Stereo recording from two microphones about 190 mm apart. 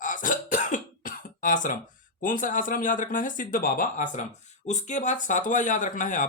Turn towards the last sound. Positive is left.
turn(degrees=40)  # may be behind; listen again after turning